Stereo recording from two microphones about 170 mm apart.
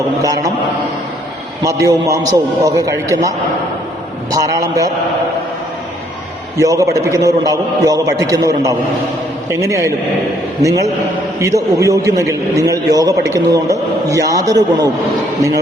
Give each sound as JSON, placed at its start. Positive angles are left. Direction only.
{"t": 0.2, "sound": "a man's voice", "side_deg": -20}
{"t": 1.6, "sound": "a man's voice", "side_deg": -20}
{"t": 6.6, "sound": "a man's voice", "side_deg": -20}